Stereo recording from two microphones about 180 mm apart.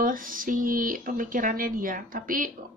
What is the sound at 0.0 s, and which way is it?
Speech, 50° right (ahead or behind).